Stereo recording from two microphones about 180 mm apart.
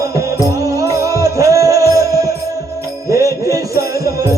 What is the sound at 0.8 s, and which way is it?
Music, 20° right (ahead or behind).